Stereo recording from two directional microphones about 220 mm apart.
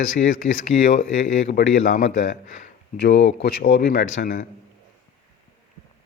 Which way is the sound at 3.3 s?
50° left (ahead or behind).